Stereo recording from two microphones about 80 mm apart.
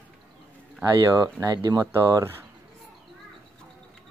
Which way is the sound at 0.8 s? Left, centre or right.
Right.